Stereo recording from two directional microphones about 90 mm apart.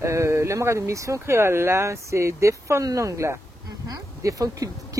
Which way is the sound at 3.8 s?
40° right (ahead or behind).